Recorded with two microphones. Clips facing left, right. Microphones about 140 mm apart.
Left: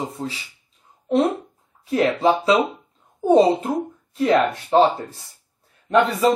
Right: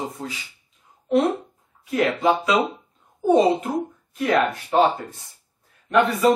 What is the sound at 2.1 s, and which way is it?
Speech, 30° left (ahead or behind).